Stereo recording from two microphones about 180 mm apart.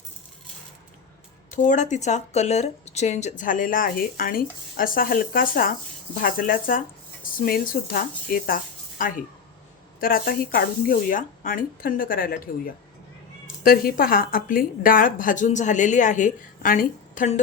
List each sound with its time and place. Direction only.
1.5 s speech: 45° left (ahead or behind)
13.7 s speech: 55° left (ahead or behind)